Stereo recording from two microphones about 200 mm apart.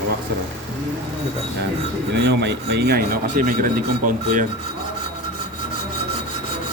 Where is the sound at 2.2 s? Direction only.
60° right (ahead or behind); by 4.1 s 45° right (ahead or behind).